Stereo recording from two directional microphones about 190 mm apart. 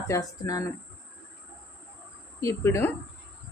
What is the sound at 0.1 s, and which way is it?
Speech, 20° left (ahead or behind).